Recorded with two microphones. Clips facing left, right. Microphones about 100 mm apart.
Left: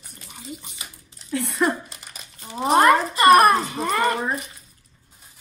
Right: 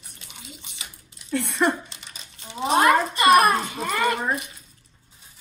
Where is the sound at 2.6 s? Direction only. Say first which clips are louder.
Left 2 dB; 45° left (ahead or behind).